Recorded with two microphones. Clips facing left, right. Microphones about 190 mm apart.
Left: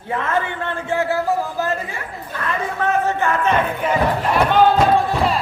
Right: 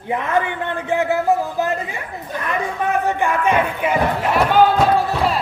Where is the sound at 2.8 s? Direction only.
15° right (ahead or behind).